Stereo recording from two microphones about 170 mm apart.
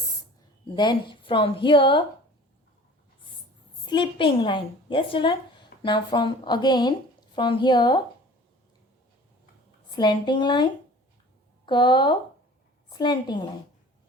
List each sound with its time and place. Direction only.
0.8 s a woman's voice: 25° left (ahead or behind)
3.8 s a woman's voice: 30° left (ahead or behind)
9.9 s a woman's voice: 25° left (ahead or behind)